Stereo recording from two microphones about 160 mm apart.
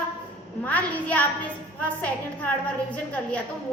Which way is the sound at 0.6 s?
10° left (ahead or behind).